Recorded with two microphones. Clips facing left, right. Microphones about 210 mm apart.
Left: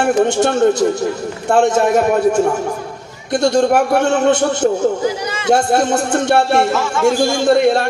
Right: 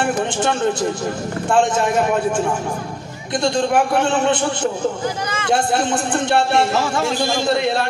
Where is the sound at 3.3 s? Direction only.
40° left (ahead or behind).